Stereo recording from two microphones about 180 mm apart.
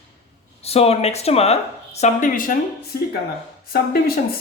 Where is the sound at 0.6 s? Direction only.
35° left (ahead or behind).